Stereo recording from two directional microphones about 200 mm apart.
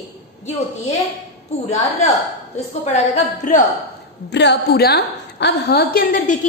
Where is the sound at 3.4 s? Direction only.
40° left (ahead or behind).